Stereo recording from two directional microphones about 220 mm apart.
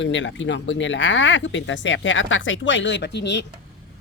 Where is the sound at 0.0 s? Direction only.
60° left (ahead or behind).